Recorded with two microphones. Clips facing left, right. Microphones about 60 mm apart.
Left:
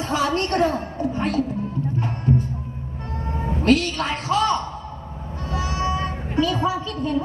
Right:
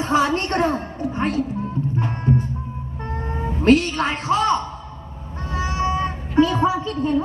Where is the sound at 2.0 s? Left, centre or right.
Right.